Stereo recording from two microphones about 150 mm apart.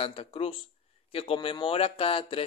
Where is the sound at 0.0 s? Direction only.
40° left (ahead or behind).